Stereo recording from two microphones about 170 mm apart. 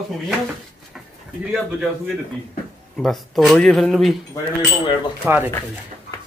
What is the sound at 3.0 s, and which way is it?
Speech, centre (ahead or behind).